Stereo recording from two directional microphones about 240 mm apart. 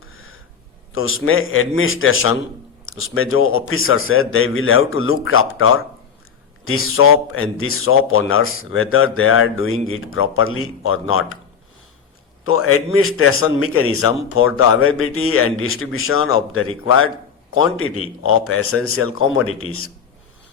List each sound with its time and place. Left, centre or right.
0.0 s a sound: left
0.9 s speech: left
12.5 s speech: left